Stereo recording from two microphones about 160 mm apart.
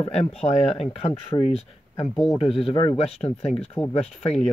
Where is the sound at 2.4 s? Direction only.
35° left (ahead or behind).